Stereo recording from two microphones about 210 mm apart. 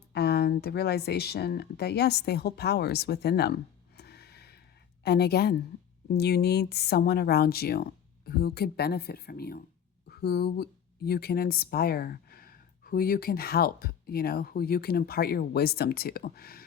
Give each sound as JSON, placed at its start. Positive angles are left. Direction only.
{"t": 0.1, "sound": "speech", "side_deg": 50}
{"t": 3.9, "sound": "music", "side_deg": 50}
{"t": 5.0, "sound": "speech", "side_deg": 50}